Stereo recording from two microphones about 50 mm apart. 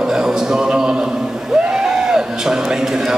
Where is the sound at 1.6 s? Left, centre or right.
Centre.